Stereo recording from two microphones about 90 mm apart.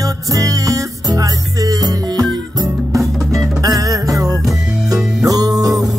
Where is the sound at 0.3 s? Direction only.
40° right (ahead or behind).